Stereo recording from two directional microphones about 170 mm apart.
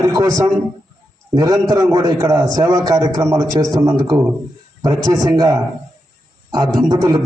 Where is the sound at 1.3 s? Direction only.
20° right (ahead or behind).